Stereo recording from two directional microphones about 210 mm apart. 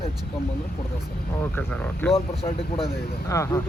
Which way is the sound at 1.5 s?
5° left (ahead or behind).